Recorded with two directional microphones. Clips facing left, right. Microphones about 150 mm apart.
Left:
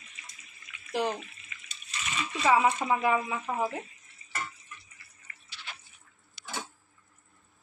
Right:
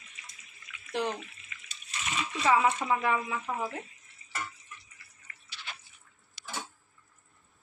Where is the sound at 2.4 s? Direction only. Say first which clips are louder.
Left 1 dB; 15° left (ahead or behind).